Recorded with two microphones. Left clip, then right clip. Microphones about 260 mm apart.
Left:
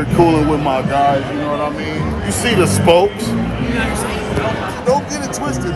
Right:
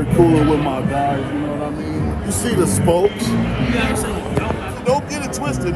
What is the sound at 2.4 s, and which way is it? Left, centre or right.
Speech, centre.